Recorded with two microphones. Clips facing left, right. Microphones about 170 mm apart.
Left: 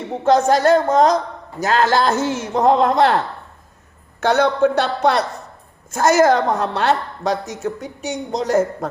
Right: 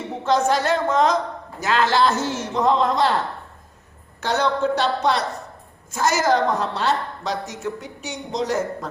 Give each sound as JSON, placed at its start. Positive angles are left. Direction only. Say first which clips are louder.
{"t": 0.3, "sound": "a woman's voice", "louder": "left 6 dB", "side_deg": 45}
{"t": 4.2, "sound": "a woman's voice", "louder": "left 6 dB", "side_deg": 55}